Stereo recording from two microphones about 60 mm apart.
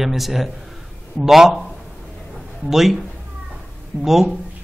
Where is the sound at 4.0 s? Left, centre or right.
Centre.